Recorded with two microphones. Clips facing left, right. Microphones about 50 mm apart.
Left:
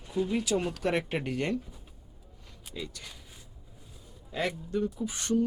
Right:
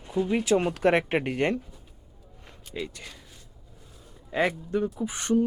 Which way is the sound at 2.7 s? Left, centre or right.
Right.